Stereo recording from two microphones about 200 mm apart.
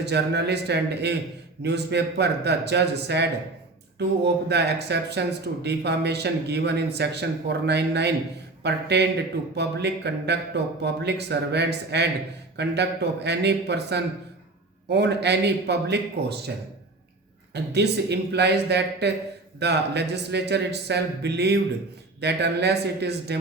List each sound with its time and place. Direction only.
0.0 s speech: 55° right (ahead or behind)
17.5 s speech: 55° right (ahead or behind)